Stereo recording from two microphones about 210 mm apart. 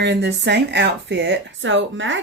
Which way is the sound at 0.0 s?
55° right (ahead or behind).